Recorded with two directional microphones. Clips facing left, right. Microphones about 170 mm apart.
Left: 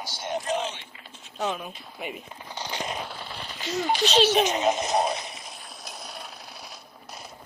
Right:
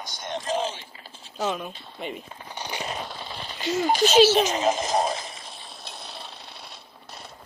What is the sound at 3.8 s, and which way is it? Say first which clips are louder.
Speech: right 3 dB; 40° right (ahead or behind).